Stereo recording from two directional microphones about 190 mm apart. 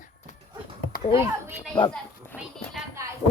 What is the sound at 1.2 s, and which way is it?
Speech, 15° right (ahead or behind).